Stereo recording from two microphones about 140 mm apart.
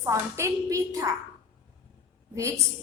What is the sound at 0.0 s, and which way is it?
A woman's voice, 20° right (ahead or behind).